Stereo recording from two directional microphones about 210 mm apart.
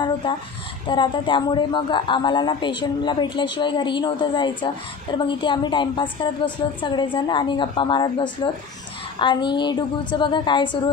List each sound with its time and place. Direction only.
0.8 s a man's voice: 25° left (ahead or behind)